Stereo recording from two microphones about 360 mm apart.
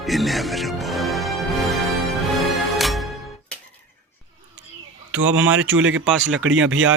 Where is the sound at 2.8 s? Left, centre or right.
Centre.